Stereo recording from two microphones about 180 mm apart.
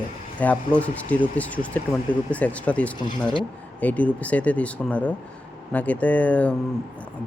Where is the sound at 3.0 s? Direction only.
25° left (ahead or behind).